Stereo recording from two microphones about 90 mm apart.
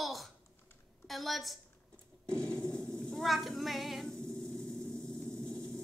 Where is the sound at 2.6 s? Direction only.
10° left (ahead or behind).